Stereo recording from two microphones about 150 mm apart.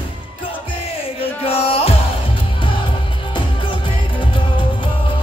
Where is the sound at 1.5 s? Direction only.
40° left (ahead or behind).